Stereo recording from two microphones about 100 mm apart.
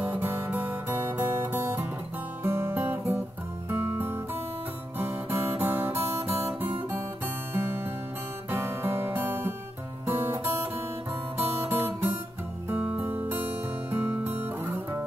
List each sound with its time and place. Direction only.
0.0 s music: 25° right (ahead or behind)
6.0 s guitar: 25° right (ahead or behind)
7.5 s music: 20° right (ahead or behind)